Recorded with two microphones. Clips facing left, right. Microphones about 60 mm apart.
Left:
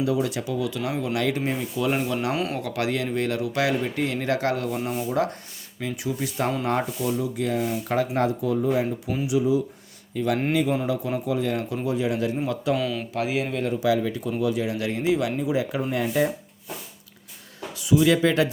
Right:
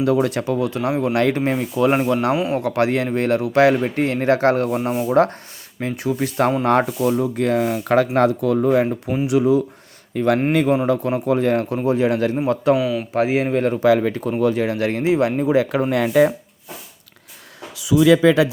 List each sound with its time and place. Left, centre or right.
0.0 s speech: right
2.3 s a man's voice: centre
2.6 s speech: right
5.0 s speech: right
7.9 s speech: right
12.7 s a man's voice: centre
13.1 s speech: right
15.4 s speech: right
15.7 s speech: right